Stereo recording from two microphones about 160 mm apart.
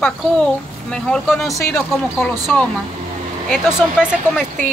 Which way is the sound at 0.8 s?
5° left (ahead or behind).